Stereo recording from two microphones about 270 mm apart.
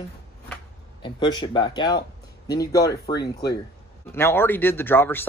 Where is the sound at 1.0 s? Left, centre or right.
Centre.